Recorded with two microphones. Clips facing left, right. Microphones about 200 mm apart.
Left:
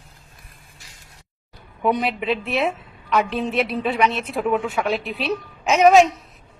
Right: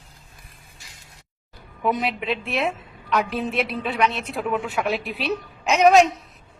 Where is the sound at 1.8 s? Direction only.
Centre (ahead or behind).